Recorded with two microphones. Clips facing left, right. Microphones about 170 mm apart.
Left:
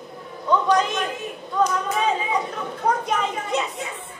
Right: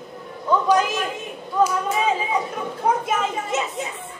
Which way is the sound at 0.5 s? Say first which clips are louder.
Right 1 dB; 5° right (ahead or behind).